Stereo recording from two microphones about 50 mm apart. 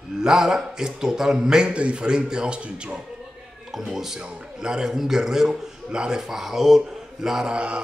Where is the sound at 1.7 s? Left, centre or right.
Right.